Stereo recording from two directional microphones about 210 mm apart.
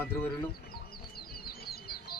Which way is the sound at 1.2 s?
45° left (ahead or behind).